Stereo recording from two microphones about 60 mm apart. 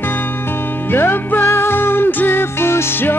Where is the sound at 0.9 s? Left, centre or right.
Left.